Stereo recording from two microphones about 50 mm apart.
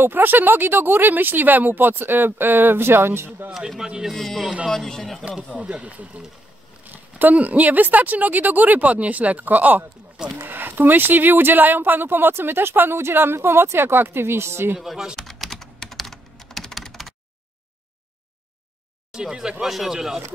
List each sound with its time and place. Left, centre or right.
0.0 s speech: right
3.5 s a man's voice: centre
4.1 s speech: centre
5.6 s speech: right
14.8 s speech: centre
15.1 s typing: centre
19.1 s speech: centre